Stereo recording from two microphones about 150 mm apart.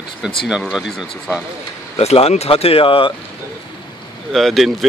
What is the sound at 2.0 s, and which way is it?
Speech, 40° left (ahead or behind).